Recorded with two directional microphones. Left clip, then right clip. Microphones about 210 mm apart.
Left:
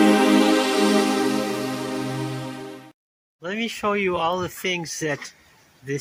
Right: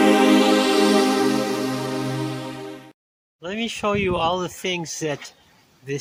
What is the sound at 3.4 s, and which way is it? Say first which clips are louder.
A man's voice: even; 5° right (ahead or behind).